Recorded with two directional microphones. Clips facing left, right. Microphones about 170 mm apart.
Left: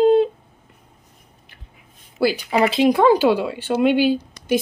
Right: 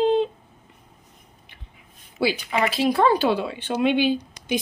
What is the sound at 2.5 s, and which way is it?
Speech, 35° left (ahead or behind).